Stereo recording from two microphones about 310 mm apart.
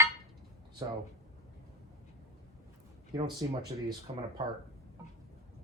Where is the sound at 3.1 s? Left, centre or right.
Centre.